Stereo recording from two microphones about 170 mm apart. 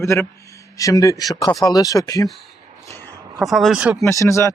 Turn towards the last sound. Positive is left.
turn(degrees=15)  # may be behind; listen again after turning